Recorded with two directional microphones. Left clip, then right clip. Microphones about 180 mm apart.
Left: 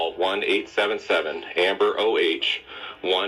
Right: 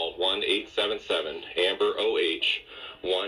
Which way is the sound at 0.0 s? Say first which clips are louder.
Left 3 dB; 25° left (ahead or behind).